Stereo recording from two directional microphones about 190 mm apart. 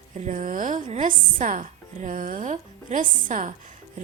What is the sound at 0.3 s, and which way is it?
A woman's voice, 45° right (ahead or behind).